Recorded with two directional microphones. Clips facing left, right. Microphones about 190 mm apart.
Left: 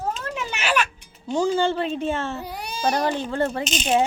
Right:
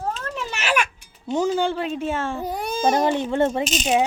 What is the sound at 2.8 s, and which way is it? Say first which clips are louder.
Speech: right 3 dB; 20° right (ahead or behind).